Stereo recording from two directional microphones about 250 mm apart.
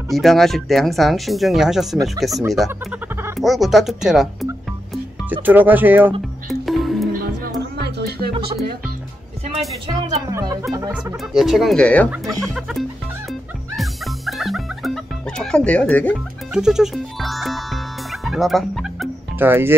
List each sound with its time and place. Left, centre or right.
0.1 s speech: centre
6.6 s music: centre
7.8 s music: right
9.9 s music: centre
11.3 s speech: centre
12.1 s chicken: centre
13.3 s music: centre
18.2 s fowl: centre